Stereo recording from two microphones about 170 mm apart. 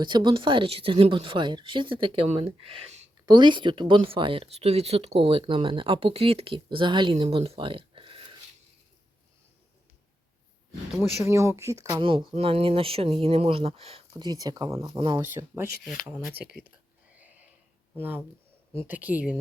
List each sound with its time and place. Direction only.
0.0 s speech: 25° right (ahead or behind)
3.2 s speech: 25° right (ahead or behind)
11.3 s speech: 15° right (ahead or behind); by 14.0 s 35° right (ahead or behind)
14.1 s speech: 20° right (ahead or behind)
15.2 s speech: 15° right (ahead or behind)
16.3 s speech: 75° right (ahead or behind)
17.2 s a sound: 10° right (ahead or behind)
17.9 s speech: 10° right (ahead or behind)